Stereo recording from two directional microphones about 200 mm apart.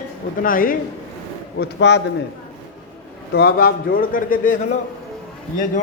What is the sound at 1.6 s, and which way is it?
Speech, 60° left (ahead or behind).